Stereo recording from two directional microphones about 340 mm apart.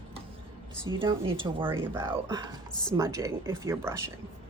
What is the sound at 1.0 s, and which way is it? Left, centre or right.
A woman's voice, centre.